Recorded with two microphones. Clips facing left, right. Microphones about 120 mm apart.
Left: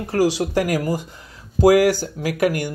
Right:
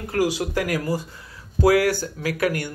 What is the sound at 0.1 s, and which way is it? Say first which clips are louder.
Speech: left 4 dB; 30° left (ahead or behind).